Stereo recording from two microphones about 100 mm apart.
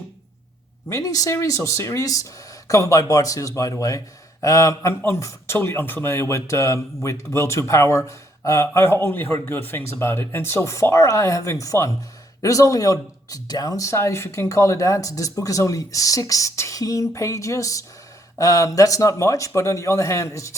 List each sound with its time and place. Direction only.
0.9 s a man's voice: 35° left (ahead or behind)